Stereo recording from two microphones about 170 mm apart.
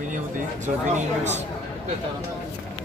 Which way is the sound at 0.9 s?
40° right (ahead or behind).